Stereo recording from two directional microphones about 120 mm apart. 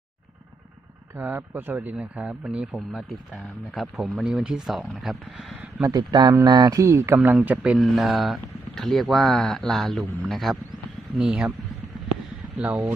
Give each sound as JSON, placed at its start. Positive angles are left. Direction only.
{"t": 1.1, "sound": "speech", "side_deg": -15}
{"t": 5.8, "sound": "speech", "side_deg": -35}
{"t": 7.3, "sound": "speech", "side_deg": -10}
{"t": 12.5, "sound": "speech", "side_deg": -10}